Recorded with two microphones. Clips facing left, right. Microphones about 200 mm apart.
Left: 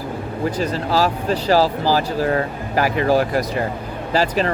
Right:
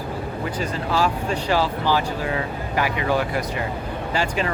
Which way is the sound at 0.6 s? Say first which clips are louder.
Left 3 dB; 35° left (ahead or behind).